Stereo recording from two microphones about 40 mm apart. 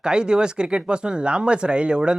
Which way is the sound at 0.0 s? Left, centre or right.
Right.